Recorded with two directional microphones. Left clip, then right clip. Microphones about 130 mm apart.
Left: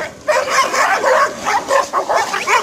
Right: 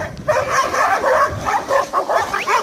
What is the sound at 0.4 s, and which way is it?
Bow-wow, 10° left (ahead or behind).